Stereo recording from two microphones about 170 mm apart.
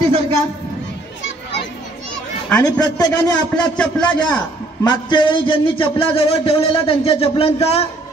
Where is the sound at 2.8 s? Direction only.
20° left (ahead or behind).